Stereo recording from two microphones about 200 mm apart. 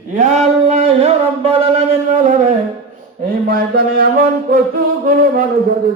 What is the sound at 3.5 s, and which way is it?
Music, 50° right (ahead or behind).